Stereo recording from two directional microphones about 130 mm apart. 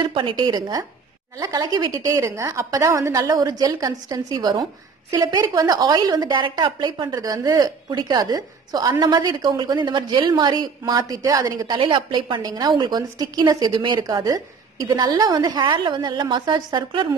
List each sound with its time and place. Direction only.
0.0 s a woman's voice: 40° right (ahead or behind)